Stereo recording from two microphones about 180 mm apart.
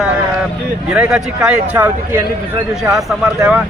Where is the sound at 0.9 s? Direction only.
5° right (ahead or behind).